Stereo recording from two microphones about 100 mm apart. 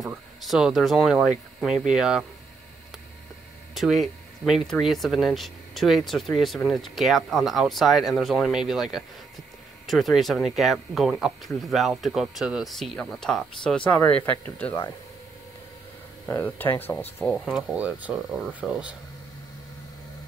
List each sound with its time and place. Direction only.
0.0 s speech: centre (ahead or behind)
3.7 s speech: centre (ahead or behind)
13.8 s speech: 15° left (ahead or behind)
16.3 s speech: 25° left (ahead or behind)
17.5 s speech: centre (ahead or behind)
17.7 s speech: 15° right (ahead or behind)